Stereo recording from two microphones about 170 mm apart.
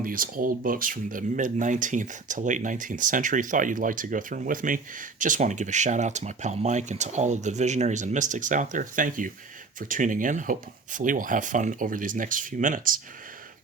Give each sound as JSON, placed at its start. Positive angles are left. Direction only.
{"t": 0.0, "sound": "speech", "side_deg": -55}